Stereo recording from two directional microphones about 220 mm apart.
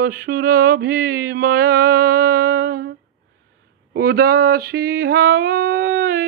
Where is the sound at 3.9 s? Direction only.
45° right (ahead or behind).